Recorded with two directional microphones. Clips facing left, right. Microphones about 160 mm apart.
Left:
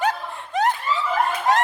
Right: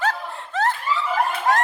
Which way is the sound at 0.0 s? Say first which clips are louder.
Left 1 dB; 15° left (ahead or behind).